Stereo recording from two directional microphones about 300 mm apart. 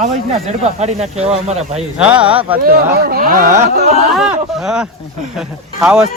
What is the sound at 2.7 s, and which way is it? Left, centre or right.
Speech, right.